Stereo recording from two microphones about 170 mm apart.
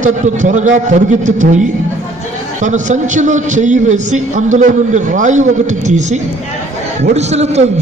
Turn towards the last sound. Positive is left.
turn(degrees=-40)  # may be behind; listen again after turning